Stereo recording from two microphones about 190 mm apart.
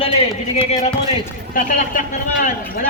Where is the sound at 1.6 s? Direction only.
45° left (ahead or behind).